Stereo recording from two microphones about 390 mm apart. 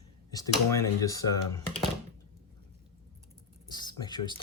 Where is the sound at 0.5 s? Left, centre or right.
Centre.